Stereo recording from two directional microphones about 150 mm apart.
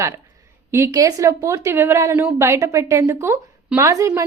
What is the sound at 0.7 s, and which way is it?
A woman's voice, 20° right (ahead or behind).